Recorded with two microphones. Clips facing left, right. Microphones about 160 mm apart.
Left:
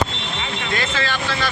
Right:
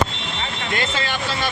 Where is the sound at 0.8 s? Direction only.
20° right (ahead or behind).